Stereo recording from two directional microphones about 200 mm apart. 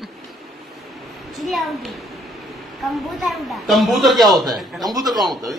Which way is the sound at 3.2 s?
Centre (ahead or behind).